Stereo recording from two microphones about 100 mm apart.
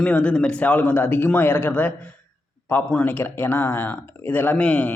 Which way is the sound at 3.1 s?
20° left (ahead or behind).